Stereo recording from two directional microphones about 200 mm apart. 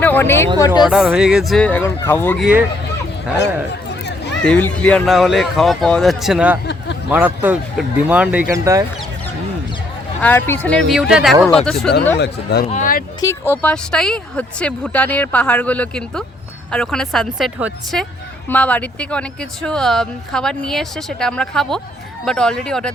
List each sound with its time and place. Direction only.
0.0 s a sound: 10° left (ahead or behind)
0.9 s speech: 5° right (ahead or behind)
2.4 s speech: 5° right (ahead or behind)
4.4 s speech: 10° left (ahead or behind); by 8.8 s 15° right (ahead or behind)
10.2 s speech: 10° left (ahead or behind)
10.9 s speech: 5° right (ahead or behind)
12.2 s speech: 55° left (ahead or behind)
12.6 s speech: 40° left (ahead or behind)
13.2 s speech: 10° left (ahead or behind)